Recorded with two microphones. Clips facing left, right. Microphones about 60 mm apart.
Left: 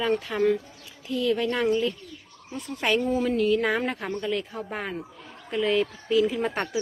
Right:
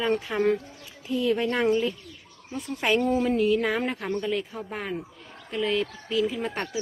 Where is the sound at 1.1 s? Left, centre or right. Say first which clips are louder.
Even; right.